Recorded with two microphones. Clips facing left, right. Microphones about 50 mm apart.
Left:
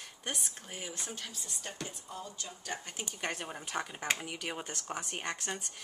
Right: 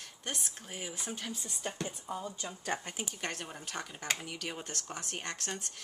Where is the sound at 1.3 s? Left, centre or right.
Right.